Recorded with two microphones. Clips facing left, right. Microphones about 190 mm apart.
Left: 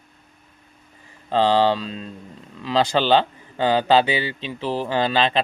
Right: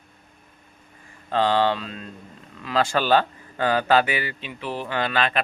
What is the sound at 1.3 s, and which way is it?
Speech, 30° left (ahead or behind).